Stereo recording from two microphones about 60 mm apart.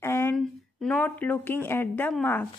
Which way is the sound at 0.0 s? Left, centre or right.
Left.